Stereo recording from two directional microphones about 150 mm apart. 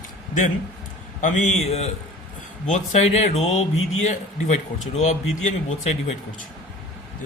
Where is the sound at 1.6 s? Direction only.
45° left (ahead or behind).